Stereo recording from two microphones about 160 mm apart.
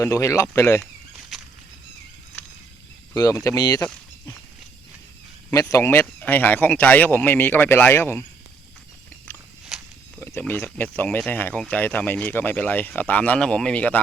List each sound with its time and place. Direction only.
0.0 s speech: 20° left (ahead or behind)
3.2 s speech: 20° left (ahead or behind)
5.5 s speech: 20° left (ahead or behind)
9.7 s snake: centre (ahead or behind)
10.2 s speech: 15° left (ahead or behind)